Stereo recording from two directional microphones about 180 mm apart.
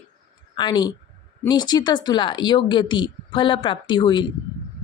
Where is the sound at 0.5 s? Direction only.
25° left (ahead or behind).